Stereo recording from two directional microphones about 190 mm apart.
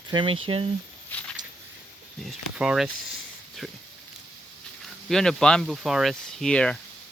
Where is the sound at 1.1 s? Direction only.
10° left (ahead or behind).